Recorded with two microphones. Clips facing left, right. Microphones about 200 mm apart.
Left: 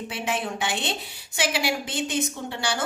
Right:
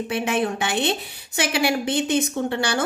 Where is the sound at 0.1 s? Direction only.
60° right (ahead or behind).